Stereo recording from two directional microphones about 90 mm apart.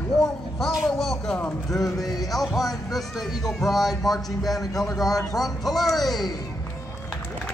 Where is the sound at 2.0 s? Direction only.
45° left (ahead or behind).